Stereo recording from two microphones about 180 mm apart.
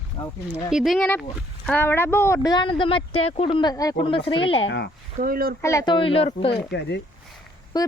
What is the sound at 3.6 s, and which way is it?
Speech, 20° left (ahead or behind).